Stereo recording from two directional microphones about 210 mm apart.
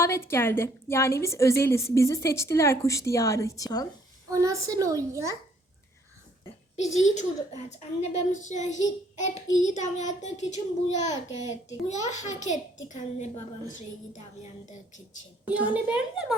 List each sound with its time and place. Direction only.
0.0 s a woman's voice: 10° left (ahead or behind)
4.3 s a child's voice: 15° right (ahead or behind)
6.9 s a woman's voice: 35° left (ahead or behind)
15.4 s a child's voice: 5° right (ahead or behind)